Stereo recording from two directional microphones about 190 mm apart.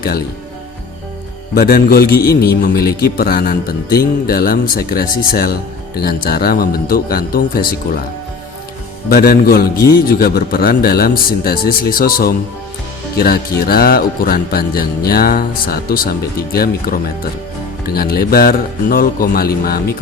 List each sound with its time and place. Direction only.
1.5 s speech: 50° left (ahead or behind)
9.0 s speech: 50° left (ahead or behind)
17.9 s speech: 50° left (ahead or behind)